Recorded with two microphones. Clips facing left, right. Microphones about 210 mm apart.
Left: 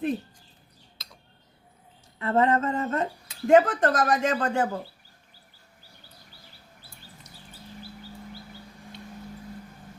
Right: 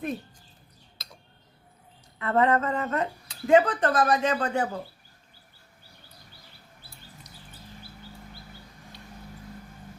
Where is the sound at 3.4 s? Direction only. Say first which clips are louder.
Left 1 dB; 45° left (ahead or behind).